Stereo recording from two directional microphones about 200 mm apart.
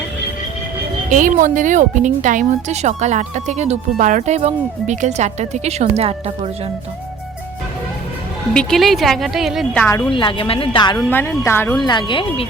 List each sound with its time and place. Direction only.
1.1 s speech: 40° right (ahead or behind)
8.5 s a woman's voice: centre (ahead or behind)
9.8 s speech: 10° left (ahead or behind)
10.1 s speech: 25° left (ahead or behind)
11.1 s speech: 10° left (ahead or behind)
11.8 s speech: 25° left (ahead or behind)